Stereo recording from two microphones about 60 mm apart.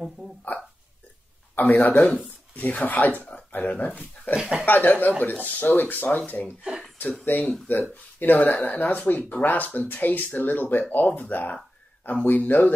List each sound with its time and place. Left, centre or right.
0.2 s speech: centre
1.5 s speech: left
4.4 s speech: centre
4.6 s speech: left